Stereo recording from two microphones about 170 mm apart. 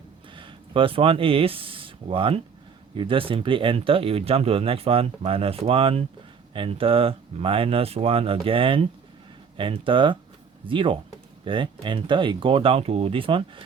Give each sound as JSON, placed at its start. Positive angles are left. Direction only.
{"t": 0.3, "sound": "speech", "side_deg": -30}